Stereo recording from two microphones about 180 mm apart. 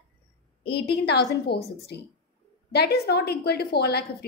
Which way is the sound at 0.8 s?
65° left (ahead or behind).